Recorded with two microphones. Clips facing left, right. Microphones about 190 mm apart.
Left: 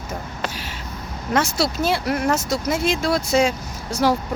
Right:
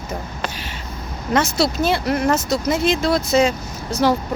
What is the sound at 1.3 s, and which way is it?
Speech, 10° left (ahead or behind).